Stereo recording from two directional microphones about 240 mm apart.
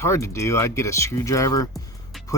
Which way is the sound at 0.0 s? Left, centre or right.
Centre.